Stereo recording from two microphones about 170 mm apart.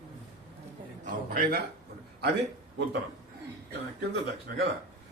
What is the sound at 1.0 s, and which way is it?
Speech, 60° right (ahead or behind).